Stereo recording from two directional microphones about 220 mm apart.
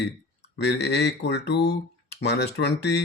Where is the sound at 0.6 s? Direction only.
50° left (ahead or behind).